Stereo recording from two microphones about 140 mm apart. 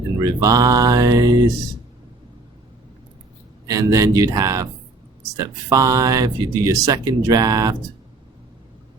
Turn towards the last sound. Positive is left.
turn(degrees=-25)  # may be behind; listen again after turning